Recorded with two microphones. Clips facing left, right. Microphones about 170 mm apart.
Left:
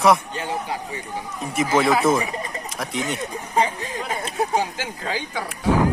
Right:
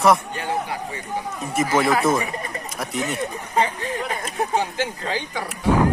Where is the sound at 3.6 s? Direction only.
20° left (ahead or behind).